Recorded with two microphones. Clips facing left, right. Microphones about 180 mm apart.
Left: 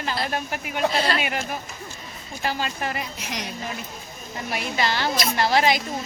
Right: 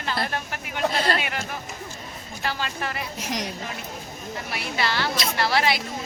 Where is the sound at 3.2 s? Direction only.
45° right (ahead or behind).